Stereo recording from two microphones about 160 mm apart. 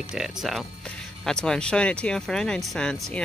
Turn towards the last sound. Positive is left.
turn(degrees=5)  # may be behind; listen again after turning